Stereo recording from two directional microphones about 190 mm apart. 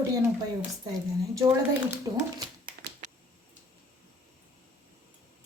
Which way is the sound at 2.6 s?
50° right (ahead or behind).